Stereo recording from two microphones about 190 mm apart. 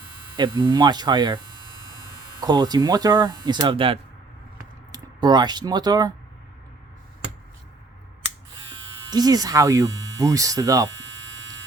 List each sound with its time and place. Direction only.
0.3 s speech: 25° right (ahead or behind)
2.4 s speech: 20° right (ahead or behind)
8.7 s speech: 20° right (ahead or behind)